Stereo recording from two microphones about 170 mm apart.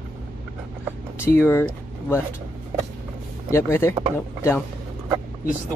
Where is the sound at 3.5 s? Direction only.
15° left (ahead or behind).